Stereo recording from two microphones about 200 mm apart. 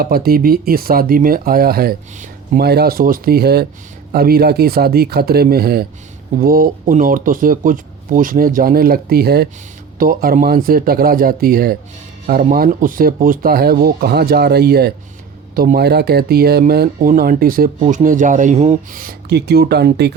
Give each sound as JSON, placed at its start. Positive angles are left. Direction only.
{"t": 0.0, "sound": "speech", "side_deg": -50}